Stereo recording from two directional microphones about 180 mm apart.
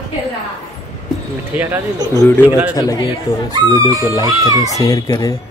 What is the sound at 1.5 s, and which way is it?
Speech, 10° right (ahead or behind).